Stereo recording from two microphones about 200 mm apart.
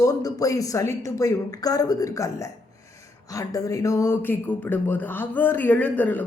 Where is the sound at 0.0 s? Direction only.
15° left (ahead or behind).